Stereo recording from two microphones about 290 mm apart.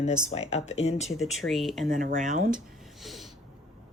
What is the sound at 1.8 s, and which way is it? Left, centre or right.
Speech, right.